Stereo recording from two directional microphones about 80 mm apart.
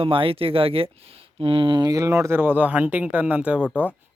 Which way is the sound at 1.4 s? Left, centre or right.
Right.